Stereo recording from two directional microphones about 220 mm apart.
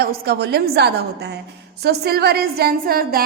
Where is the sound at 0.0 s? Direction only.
45° right (ahead or behind).